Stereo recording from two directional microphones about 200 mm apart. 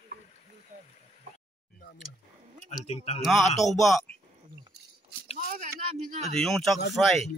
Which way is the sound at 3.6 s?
Centre (ahead or behind).